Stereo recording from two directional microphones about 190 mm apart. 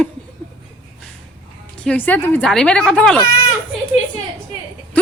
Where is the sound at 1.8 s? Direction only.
10° left (ahead or behind).